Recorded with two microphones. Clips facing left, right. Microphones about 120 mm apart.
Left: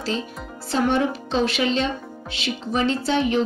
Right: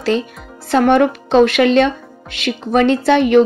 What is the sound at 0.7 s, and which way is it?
A woman's voice, 65° right (ahead or behind).